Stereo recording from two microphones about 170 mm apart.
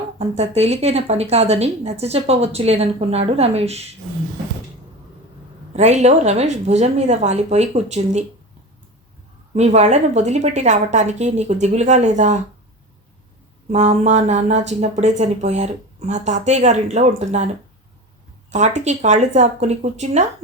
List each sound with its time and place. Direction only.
0.2 s speech: 40° right (ahead or behind)
5.7 s speech: 40° right (ahead or behind)
9.6 s speech: 40° right (ahead or behind)
13.7 s speech: 40° right (ahead or behind)
18.5 s speech: 45° right (ahead or behind)